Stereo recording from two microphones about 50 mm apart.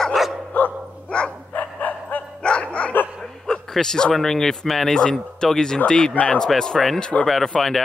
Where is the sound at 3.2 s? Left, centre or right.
Centre.